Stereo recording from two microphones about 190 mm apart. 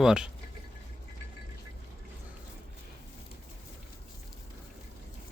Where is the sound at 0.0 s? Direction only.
5° right (ahead or behind).